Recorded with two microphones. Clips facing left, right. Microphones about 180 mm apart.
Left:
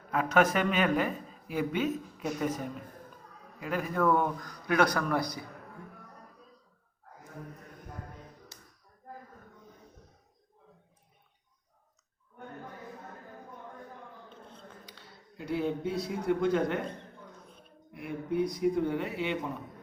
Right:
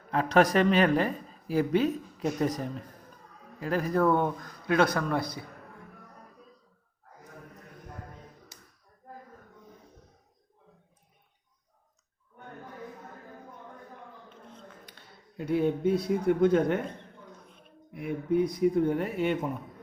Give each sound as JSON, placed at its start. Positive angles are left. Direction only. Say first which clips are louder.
{"t": 0.1, "sound": "speech", "louder": "right 3 dB", "side_deg": -35}
{"t": 3.6, "sound": "a man's voice", "louder": "right 4 dB", "side_deg": -35}
{"t": 14.8, "sound": "speech", "louder": "left 1 dB", "side_deg": -55}
{"t": 18.0, "sound": "a sound", "louder": "right 4 dB", "side_deg": -55}